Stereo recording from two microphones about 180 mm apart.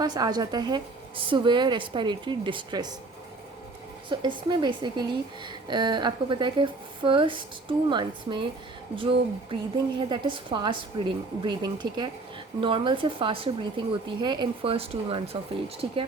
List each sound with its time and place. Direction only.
0.0 s a woman's voice: 20° right (ahead or behind)
4.1 s a woman's voice: 25° right (ahead or behind)